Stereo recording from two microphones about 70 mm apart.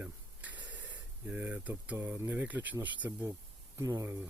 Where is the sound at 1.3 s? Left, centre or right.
Centre.